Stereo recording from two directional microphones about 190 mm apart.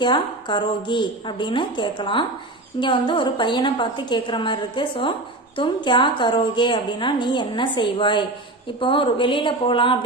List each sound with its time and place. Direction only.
0.0 s a woman's voice: 25° left (ahead or behind)